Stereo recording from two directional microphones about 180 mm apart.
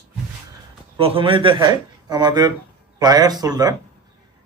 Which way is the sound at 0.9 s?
30° right (ahead or behind).